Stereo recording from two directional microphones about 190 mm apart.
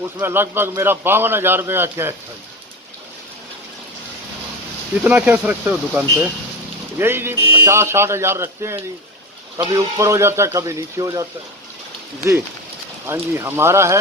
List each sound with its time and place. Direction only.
0.0 s a man's voice: 10° right (ahead or behind)
5.0 s a man's voice: 5° right (ahead or behind)
13.1 s a man's voice: 10° right (ahead or behind)